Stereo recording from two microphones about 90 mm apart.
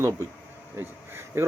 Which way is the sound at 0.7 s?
25° right (ahead or behind).